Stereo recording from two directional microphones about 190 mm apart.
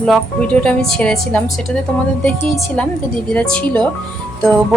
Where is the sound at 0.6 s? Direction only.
5° left (ahead or behind).